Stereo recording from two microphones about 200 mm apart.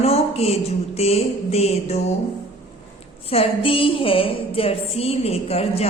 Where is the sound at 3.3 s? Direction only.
30° left (ahead or behind).